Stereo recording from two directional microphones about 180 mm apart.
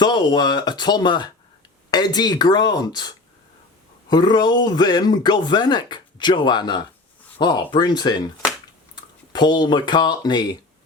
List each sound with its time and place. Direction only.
0.0 s speech: 25° left (ahead or behind)
4.1 s speech: 25° left (ahead or behind)
9.3 s speech: 25° left (ahead or behind)